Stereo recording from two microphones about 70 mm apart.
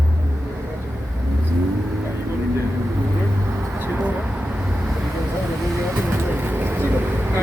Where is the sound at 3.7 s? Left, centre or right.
Right.